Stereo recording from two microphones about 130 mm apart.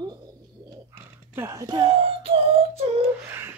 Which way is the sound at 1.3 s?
20° right (ahead or behind).